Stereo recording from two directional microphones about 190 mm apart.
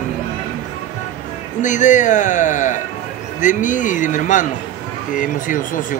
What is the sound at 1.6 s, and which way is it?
Speech, 40° left (ahead or behind).